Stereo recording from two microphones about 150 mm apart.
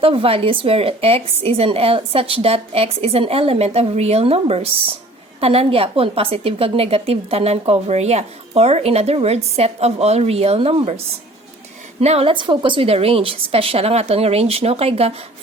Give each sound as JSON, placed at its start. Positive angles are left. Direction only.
{"t": 0.0, "sound": "a woman's voice", "side_deg": -40}